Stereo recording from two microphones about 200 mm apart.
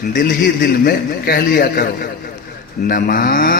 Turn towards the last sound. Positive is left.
turn(degrees=45)  # may be behind; listen again after turning